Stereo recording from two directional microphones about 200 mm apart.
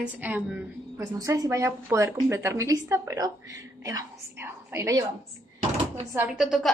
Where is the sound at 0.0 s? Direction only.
10° right (ahead or behind).